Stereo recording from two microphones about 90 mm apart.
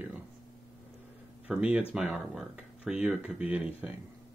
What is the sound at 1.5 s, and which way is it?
Speech, 10° right (ahead or behind).